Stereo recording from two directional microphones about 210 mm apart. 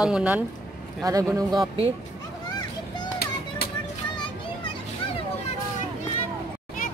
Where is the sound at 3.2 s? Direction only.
45° left (ahead or behind).